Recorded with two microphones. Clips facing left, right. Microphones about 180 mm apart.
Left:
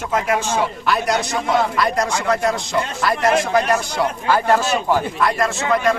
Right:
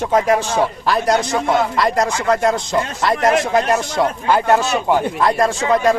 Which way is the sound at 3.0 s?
25° right (ahead or behind).